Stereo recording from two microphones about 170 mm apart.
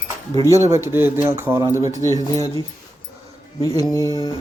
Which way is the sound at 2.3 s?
20° left (ahead or behind).